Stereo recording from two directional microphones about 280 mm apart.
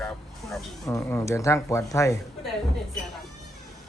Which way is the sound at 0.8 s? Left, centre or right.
Centre.